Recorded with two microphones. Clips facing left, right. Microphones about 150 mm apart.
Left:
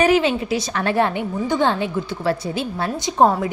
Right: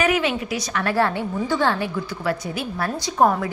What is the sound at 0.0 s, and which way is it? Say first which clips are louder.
A woman's voice: left 4 dB; 30° left (ahead or behind).